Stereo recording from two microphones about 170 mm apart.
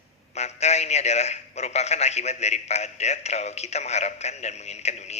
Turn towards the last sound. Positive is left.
turn(degrees=40)  # may be behind; listen again after turning